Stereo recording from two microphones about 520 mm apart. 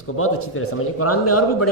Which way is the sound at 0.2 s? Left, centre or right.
Left.